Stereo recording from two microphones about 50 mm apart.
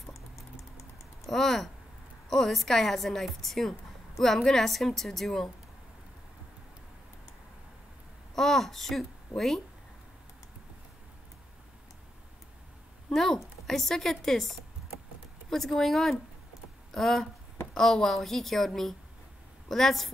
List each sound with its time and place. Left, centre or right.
0.1 s typing: left
1.2 s a woman's voice: centre
8.4 s speech: centre
13.1 s a woman's voice: centre
15.5 s a woman's voice: centre